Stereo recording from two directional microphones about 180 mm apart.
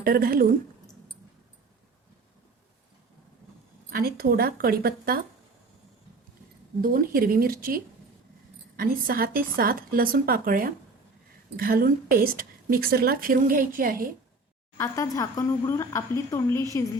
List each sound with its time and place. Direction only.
0.0 s speech: 55° right (ahead or behind)
3.8 s speech: 55° right (ahead or behind)
6.8 s a woman's voice: 50° right (ahead or behind)
14.8 s a woman's voice: 15° left (ahead or behind)